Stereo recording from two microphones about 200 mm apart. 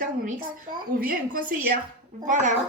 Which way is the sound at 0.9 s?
45° right (ahead or behind).